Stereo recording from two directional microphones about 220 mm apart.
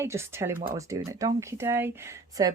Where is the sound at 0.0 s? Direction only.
10° right (ahead or behind).